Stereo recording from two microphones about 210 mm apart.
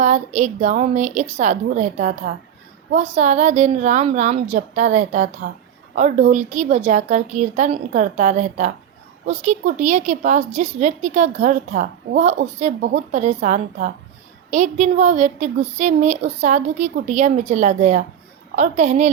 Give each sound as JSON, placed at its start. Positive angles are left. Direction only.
{"t": 0.0, "sound": "a woman's voice", "side_deg": -35}